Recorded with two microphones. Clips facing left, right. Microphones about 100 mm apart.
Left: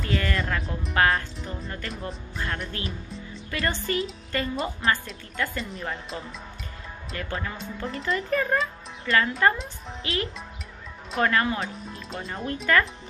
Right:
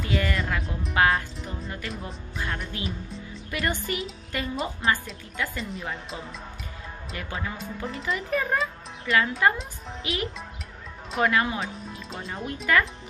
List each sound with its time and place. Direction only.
0.0 s music: 10° right (ahead or behind)
0.9 s speech: 15° right (ahead or behind)
1.7 s speech: 5° right (ahead or behind)
3.4 s speech: 15° right (ahead or behind)
4.6 s speech: centre (ahead or behind)
10.1 s speech: 15° right (ahead or behind)